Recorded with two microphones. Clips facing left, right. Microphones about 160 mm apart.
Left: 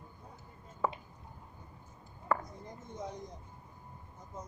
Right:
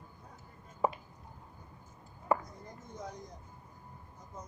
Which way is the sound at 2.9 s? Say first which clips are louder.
Left 2 dB; 25° left (ahead or behind).